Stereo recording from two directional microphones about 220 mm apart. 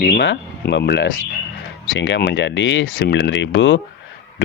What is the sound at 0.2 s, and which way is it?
Speech, 50° left (ahead or behind).